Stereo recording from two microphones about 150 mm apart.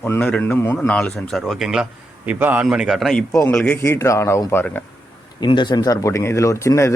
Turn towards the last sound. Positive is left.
turn(degrees=20)  # may be behind; listen again after turning